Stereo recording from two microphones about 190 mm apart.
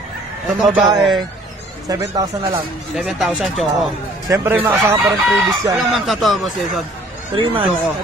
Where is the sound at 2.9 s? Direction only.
Centre (ahead or behind).